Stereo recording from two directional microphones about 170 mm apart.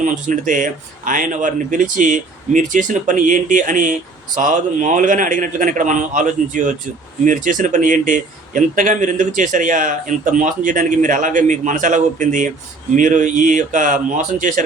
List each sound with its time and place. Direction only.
0.0 s speech: 50° right (ahead or behind)